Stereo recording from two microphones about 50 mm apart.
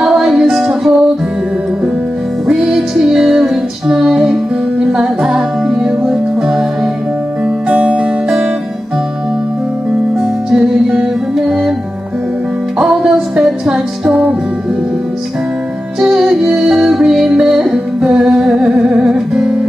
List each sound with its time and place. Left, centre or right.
0.0 s music: centre
2.4 s music: centre
7.6 s music: right
10.5 s music: centre
12.7 s music: centre
16.0 s music: centre